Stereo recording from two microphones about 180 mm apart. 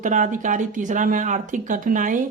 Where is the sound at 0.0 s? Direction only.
45° right (ahead or behind).